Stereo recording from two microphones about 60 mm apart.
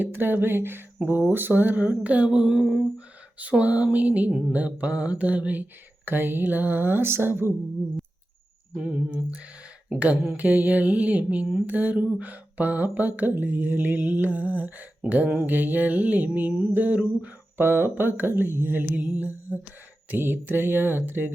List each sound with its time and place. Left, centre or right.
0.0 s mantra: right; by 2.8 s centre
3.6 s mantra: right
8.7 s mantra: centre
17.6 s mantra: right